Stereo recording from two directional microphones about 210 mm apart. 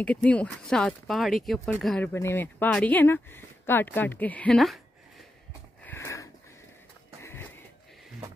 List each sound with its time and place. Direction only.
0.0 s speech: 5° left (ahead or behind)
5.9 s sniff: 15° left (ahead or behind)
7.2 s a sound: 10° left (ahead or behind)